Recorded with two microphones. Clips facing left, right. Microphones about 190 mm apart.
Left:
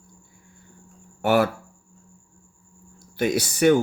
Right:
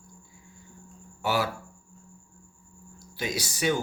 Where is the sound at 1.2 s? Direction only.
55° left (ahead or behind).